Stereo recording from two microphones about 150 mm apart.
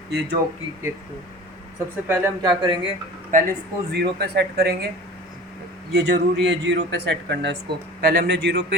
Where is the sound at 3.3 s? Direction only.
75° right (ahead or behind).